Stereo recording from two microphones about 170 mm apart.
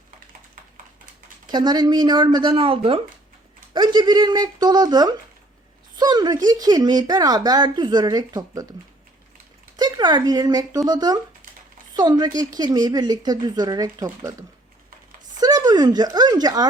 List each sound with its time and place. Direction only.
1.5 s speech: 25° right (ahead or behind)
9.7 s speech: 25° right (ahead or behind)
15.4 s speech: 25° right (ahead or behind)